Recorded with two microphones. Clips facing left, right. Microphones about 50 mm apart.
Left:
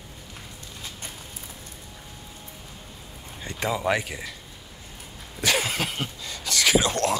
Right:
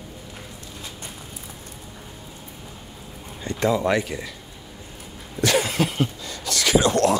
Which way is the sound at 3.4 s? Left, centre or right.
Centre.